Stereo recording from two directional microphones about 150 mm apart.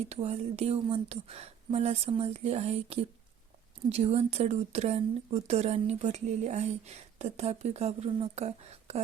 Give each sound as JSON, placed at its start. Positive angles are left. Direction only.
{"t": 0.0, "sound": "speech", "side_deg": -45}